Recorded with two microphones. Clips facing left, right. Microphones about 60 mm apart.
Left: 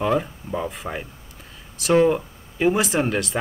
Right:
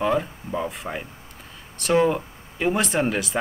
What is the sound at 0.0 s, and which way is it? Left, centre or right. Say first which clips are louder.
Speech: left 1 dB; centre.